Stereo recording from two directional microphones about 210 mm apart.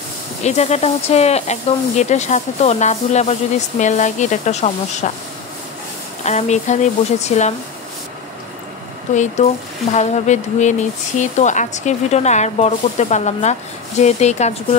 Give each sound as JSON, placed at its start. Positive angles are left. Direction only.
{"t": 0.4, "sound": "speech", "side_deg": 30}
{"t": 6.2, "sound": "speech", "side_deg": 35}
{"t": 9.1, "sound": "speech", "side_deg": 35}